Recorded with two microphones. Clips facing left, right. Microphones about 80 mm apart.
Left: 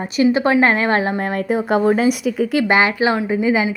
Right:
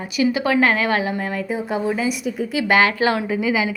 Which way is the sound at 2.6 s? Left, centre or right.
Left.